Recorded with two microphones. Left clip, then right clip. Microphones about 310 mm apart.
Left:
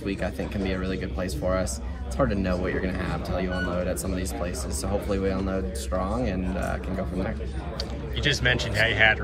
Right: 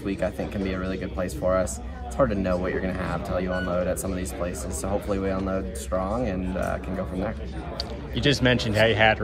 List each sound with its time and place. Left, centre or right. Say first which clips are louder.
0.0 s speech: right 2 dB; centre